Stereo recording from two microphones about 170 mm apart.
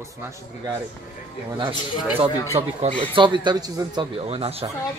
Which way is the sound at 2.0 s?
5° right (ahead or behind).